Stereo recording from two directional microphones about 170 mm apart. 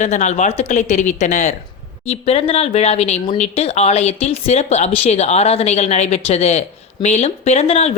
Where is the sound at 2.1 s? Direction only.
35° left (ahead or behind).